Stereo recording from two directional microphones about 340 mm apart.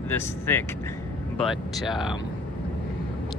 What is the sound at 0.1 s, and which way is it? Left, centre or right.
Speech, centre.